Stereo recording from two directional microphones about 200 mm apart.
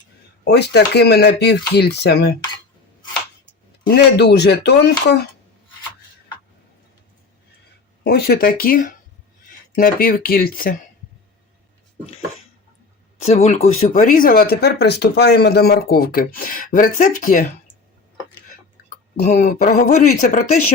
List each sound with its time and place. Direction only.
0.4 s speech: 50° left (ahead or behind)
3.9 s speech: 55° left (ahead or behind)
8.0 s speech: 50° left (ahead or behind)
13.1 s speech: 35° left (ahead or behind)
18.9 s speech: 35° left (ahead or behind)